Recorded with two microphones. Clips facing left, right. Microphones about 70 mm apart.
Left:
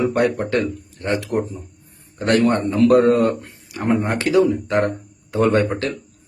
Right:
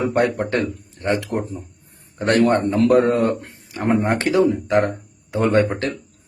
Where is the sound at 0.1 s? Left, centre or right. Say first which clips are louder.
Even; right.